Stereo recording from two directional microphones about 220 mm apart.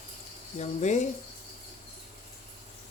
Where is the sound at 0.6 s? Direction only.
30° left (ahead or behind).